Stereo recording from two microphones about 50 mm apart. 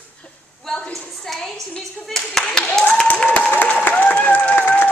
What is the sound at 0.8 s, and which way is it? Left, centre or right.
Speech, centre.